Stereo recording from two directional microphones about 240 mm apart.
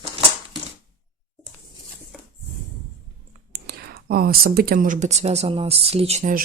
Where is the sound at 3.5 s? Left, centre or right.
Right.